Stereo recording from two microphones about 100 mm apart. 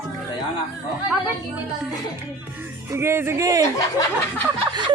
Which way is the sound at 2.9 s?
25° right (ahead or behind).